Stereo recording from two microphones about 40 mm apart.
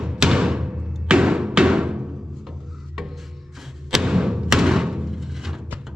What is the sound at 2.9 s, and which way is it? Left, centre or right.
Music, centre.